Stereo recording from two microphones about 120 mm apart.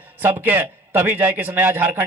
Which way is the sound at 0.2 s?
15° right (ahead or behind).